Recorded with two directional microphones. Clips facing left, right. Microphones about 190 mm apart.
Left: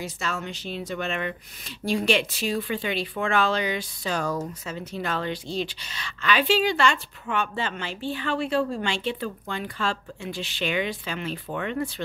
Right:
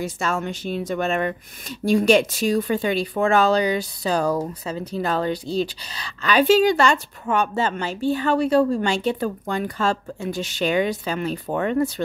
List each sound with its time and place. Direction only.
0.0 s a woman's voice: 50° right (ahead or behind)